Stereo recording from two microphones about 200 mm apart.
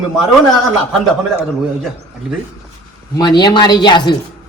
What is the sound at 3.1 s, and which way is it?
Speech, 20° left (ahead or behind).